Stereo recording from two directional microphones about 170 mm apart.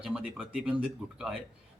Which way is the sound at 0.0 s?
5° right (ahead or behind).